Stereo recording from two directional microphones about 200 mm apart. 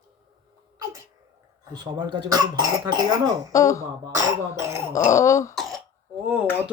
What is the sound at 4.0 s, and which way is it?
Speech, 20° right (ahead or behind).